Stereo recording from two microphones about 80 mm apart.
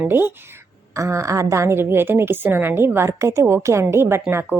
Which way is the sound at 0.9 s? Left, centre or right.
Right.